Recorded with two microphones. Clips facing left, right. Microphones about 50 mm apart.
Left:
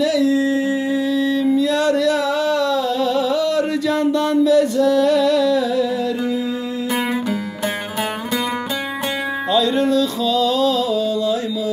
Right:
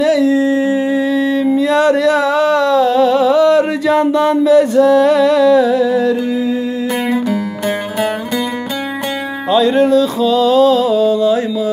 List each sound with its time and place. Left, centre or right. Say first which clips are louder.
0.0 s humming: right 5 dB; right
1.1 s a sound: right 3 dB; right
9.5 s music: right 6 dB; right